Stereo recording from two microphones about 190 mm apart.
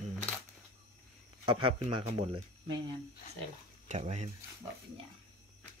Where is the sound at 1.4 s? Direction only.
25° right (ahead or behind).